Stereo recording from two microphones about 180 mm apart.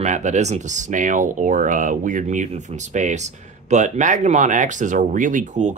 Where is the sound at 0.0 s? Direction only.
40° right (ahead or behind).